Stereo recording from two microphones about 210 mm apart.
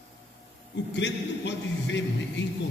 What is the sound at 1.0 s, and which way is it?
A man's voice, 60° left (ahead or behind).